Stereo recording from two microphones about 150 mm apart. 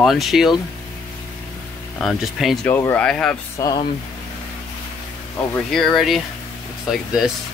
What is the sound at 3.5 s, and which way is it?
Speech, 25° left (ahead or behind).